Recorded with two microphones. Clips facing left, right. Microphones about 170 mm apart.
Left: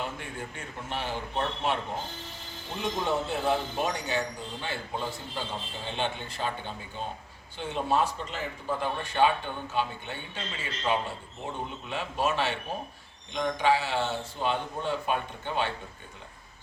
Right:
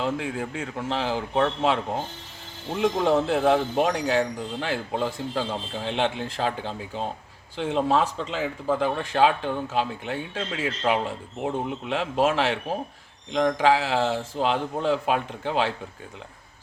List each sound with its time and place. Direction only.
0.0 s speech: 90° right